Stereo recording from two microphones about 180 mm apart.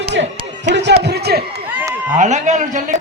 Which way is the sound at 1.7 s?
10° right (ahead or behind).